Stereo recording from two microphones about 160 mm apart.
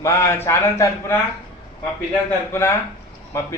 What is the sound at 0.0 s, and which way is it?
A man's voice, 15° left (ahead or behind).